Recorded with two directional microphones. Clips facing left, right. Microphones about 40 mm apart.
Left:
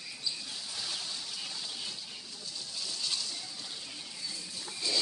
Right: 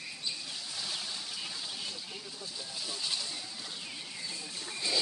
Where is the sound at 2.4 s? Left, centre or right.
Centre.